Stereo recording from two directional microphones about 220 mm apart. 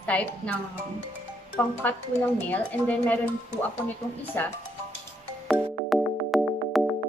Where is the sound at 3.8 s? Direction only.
10° left (ahead or behind).